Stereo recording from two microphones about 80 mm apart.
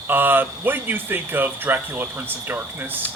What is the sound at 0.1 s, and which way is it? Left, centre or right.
A man's voice, right.